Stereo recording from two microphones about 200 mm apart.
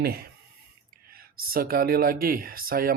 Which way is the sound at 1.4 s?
45° right (ahead or behind).